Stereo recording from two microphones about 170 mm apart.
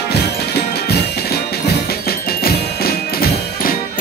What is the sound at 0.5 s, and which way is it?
Music, 70° left (ahead or behind).